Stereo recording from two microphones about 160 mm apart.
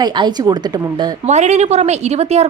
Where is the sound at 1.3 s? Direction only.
45° right (ahead or behind).